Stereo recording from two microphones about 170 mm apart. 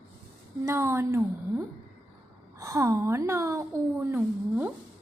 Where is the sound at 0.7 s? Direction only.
15° right (ahead or behind).